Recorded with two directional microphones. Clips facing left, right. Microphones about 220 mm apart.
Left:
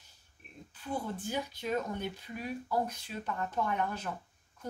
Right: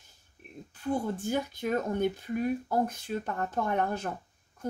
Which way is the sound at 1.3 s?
50° right (ahead or behind).